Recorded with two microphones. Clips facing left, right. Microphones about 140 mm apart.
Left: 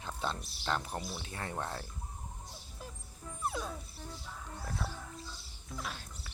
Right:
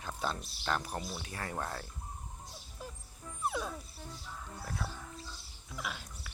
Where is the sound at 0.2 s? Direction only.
25° left (ahead or behind).